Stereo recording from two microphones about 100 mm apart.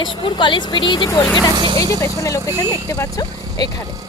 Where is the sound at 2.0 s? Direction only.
35° left (ahead or behind).